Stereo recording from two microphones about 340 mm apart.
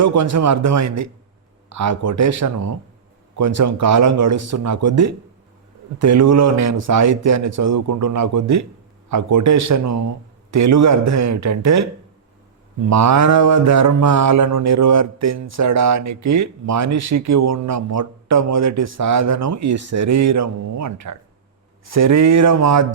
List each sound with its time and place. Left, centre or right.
0.0 s speech: right
12.9 s speech: right